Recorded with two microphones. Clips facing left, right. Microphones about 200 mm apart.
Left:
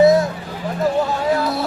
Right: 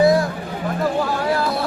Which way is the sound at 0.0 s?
20° left (ahead or behind).